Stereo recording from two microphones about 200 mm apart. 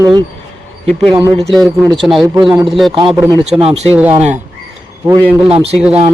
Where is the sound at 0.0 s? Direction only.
20° right (ahead or behind).